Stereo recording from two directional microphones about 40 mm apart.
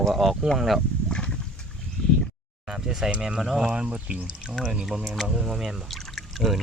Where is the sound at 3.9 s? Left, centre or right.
Right.